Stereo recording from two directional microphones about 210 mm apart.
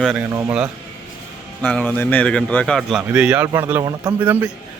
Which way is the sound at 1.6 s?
10° left (ahead or behind).